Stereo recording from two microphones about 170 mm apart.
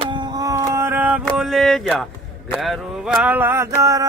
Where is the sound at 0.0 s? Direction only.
25° right (ahead or behind).